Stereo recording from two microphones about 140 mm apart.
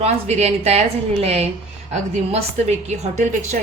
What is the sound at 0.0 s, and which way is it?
A woman's voice, 50° right (ahead or behind).